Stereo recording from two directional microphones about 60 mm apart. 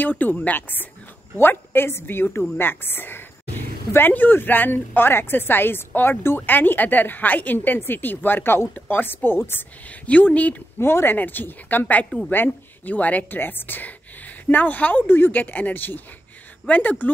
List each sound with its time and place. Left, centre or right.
0.0 s a woman's voice: left
9.8 s a woman's voice: left
10.8 s a woman's voice: left